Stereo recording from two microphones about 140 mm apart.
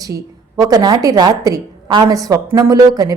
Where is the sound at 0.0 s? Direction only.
25° right (ahead or behind).